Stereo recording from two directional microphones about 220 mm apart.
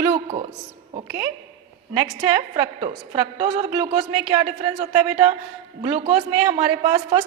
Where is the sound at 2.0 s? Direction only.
20° right (ahead or behind).